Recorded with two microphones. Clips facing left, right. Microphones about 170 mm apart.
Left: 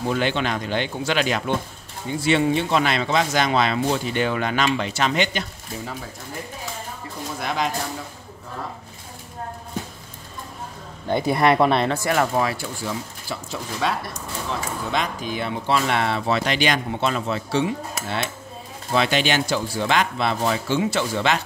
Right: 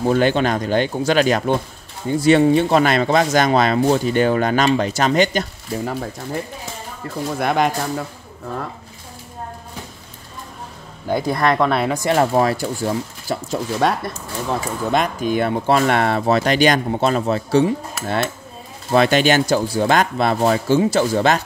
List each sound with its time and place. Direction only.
0.0 s speech: 40° right (ahead or behind)
7.3 s speech: 55° right (ahead or behind)
11.1 s speech: centre (ahead or behind)
11.3 s speech: 10° left (ahead or behind)
11.7 s speech: 5° right (ahead or behind)
12.0 s speech: 25° right (ahead or behind)
12.4 s speech: 40° right (ahead or behind)